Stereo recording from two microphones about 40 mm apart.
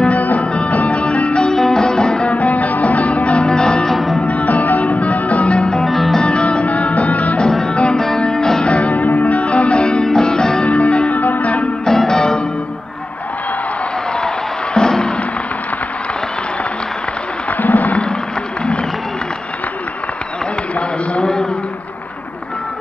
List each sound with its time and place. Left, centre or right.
0.0 s music: left
1.5 s music: centre
2.2 s music: left; by 3.9 s centre
3.9 s music: centre
4.2 s music: left
5.9 s music: centre
6.2 s music: left
8.2 s music: centre
8.6 s music: left; by 10.7 s centre
10.7 s music: left
12.0 s music: centre
14.2 s music: centre
17.5 s a sound: left
21.1 s a sound: left